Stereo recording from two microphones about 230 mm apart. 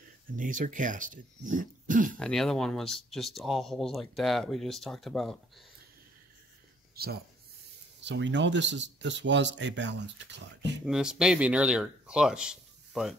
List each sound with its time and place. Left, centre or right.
0.4 s speech: right
2.1 s speech: centre
7.0 s speech: right
10.9 s speech: centre